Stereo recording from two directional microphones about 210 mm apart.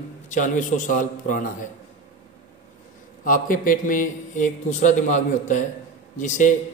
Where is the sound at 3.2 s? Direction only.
40° left (ahead or behind).